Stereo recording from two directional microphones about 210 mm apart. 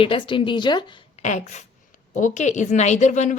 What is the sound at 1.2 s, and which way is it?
Speech, 35° left (ahead or behind).